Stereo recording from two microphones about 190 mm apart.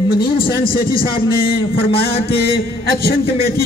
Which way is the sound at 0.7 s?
50° left (ahead or behind).